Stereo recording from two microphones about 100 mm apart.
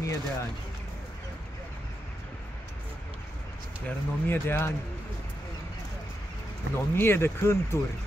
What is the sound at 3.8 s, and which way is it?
Speech, 20° left (ahead or behind).